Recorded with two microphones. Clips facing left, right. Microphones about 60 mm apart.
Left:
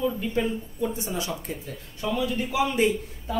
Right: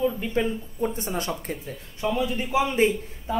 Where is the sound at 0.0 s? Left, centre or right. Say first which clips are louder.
Right 1 dB; right.